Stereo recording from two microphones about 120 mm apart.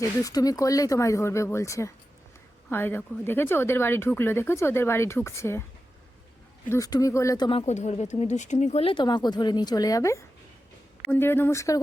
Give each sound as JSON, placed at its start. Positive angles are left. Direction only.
{"t": 0.0, "sound": "a woman's voice", "side_deg": 30}
{"t": 6.7, "sound": "a woman's voice", "side_deg": 30}
{"t": 7.6, "sound": "speech", "side_deg": 70}
{"t": 8.8, "sound": "a woman's voice", "side_deg": 45}